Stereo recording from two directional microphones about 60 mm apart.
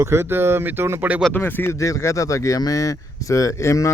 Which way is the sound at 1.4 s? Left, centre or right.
Left.